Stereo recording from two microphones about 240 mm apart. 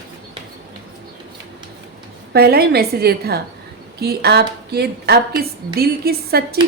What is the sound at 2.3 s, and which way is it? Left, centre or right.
A woman's voice, right.